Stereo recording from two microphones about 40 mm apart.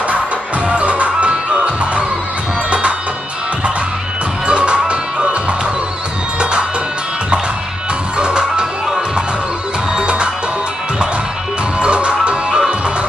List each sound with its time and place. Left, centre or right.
0.7 s music: right
4.5 s music: right
8.2 s music: right
11.8 s music: right
12.4 s music: centre